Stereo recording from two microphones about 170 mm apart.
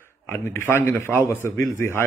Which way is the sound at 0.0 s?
15° left (ahead or behind).